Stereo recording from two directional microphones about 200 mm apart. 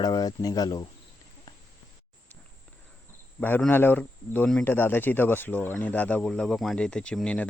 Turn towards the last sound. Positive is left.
turn(degrees=5)  # may be behind; listen again after turning